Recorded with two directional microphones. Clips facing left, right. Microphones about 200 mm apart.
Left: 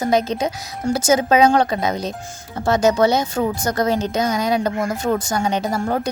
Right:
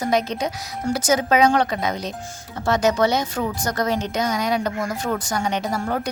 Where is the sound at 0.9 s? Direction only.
25° left (ahead or behind).